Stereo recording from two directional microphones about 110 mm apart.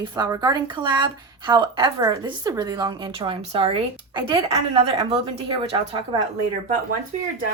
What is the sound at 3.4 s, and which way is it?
A woman's voice, 70° right (ahead or behind).